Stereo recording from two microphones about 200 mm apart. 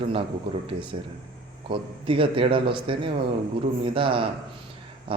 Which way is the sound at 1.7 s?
25° right (ahead or behind).